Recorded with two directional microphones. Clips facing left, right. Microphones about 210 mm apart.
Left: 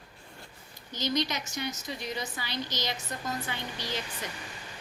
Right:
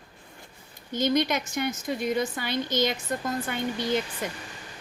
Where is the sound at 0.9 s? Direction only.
55° right (ahead or behind).